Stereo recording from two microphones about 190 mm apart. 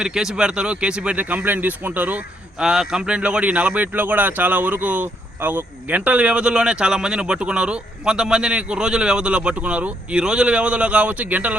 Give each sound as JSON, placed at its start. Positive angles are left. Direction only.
{"t": 0.0, "sound": "speech", "side_deg": -5}